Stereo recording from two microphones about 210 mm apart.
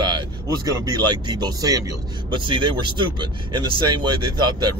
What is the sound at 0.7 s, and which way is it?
Speech, 20° right (ahead or behind).